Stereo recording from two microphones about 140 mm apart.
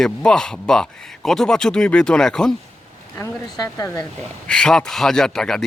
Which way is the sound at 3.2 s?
25° left (ahead or behind).